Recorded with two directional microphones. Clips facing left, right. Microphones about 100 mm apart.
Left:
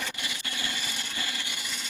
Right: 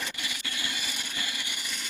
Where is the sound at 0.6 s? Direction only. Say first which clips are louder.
Left 2 dB; 15° right (ahead or behind).